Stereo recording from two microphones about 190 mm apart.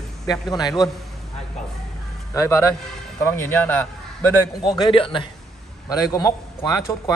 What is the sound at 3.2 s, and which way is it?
Speech, 10° left (ahead or behind).